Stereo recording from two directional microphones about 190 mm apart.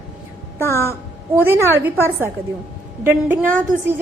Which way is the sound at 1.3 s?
10° right (ahead or behind).